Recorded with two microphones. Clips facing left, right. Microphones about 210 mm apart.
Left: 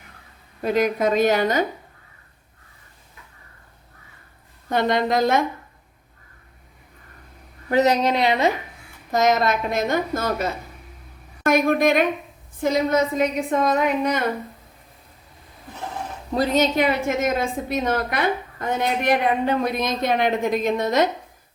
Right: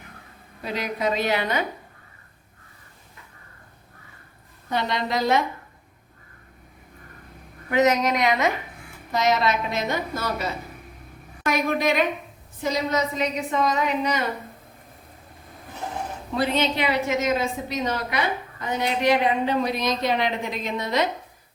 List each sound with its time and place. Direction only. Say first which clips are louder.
0.6 s a woman's voice: left 7 dB; 50° left (ahead or behind)
4.7 s a woman's voice: left 5 dB; 50° left (ahead or behind)
7.7 s a woman's voice: left 2 dB; 35° left (ahead or behind)
9.1 s a woman's voice: left 3 dB; 50° left (ahead or behind)
16.3 s a woman's voice: left 4 dB; 40° left (ahead or behind)